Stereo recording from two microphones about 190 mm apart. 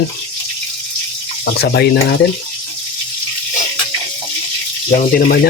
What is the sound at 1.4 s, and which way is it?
Speech, 60° left (ahead or behind).